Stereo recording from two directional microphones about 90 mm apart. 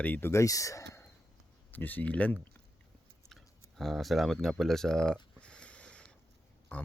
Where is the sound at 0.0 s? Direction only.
20° left (ahead or behind); by 1.0 s 35° left (ahead or behind).